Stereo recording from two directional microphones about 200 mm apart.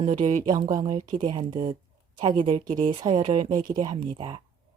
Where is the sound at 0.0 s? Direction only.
30° right (ahead or behind).